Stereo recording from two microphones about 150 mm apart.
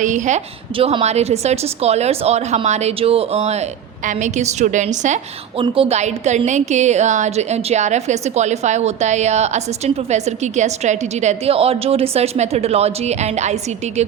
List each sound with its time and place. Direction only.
0.0 s a woman's voice: 55° right (ahead or behind)
0.8 s a woman's voice: 40° right (ahead or behind)
5.5 s a woman's voice: 35° right (ahead or behind)